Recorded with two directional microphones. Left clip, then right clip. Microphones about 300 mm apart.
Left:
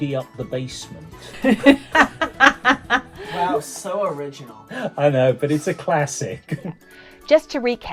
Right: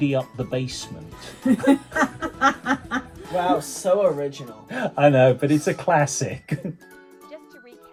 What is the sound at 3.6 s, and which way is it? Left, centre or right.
Speech, centre.